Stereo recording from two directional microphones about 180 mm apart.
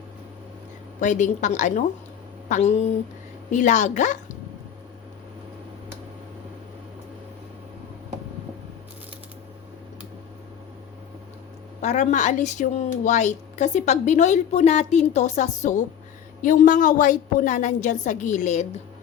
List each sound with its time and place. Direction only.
0.9 s a woman's voice: 45° left (ahead or behind)
11.8 s a woman's voice: 40° left (ahead or behind)